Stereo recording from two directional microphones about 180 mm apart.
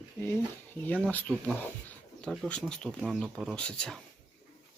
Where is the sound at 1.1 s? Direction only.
10° left (ahead or behind).